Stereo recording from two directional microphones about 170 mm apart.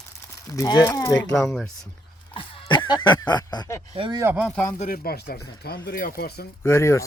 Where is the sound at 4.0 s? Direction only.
30° right (ahead or behind).